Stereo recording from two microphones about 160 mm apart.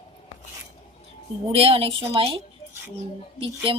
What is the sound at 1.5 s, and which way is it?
Speech, 35° right (ahead or behind).